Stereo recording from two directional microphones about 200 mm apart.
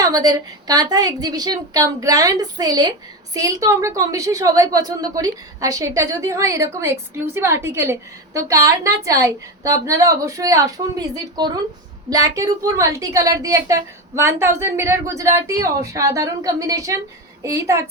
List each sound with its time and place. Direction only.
0.0 s a woman's voice: 20° right (ahead or behind)